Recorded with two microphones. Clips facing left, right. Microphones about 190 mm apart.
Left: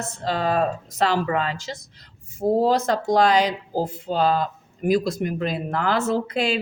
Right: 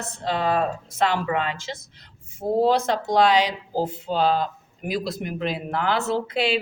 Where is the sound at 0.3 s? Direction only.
40° left (ahead or behind).